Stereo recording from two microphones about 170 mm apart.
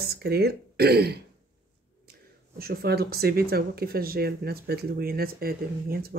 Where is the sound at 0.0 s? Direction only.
70° right (ahead or behind).